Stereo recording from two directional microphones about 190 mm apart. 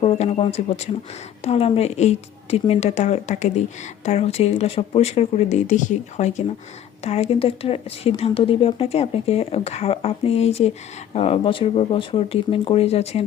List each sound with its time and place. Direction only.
0.0 s speech: 30° left (ahead or behind)